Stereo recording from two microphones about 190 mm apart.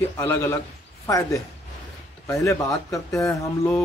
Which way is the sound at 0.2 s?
10° left (ahead or behind).